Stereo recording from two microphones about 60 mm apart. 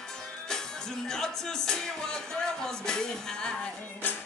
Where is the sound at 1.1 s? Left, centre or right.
Centre.